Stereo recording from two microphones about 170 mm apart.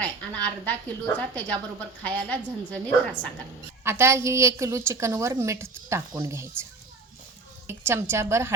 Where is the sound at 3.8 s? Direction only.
15° right (ahead or behind).